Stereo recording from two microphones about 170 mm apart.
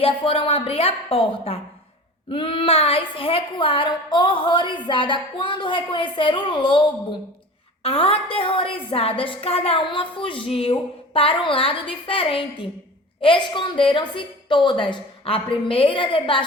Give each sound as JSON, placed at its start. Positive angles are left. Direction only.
{"t": 0.0, "sound": "a woman's voice", "side_deg": 35}
{"t": 7.9, "sound": "a woman's voice", "side_deg": 35}